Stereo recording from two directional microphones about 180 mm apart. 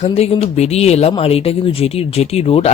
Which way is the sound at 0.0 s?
35° left (ahead or behind).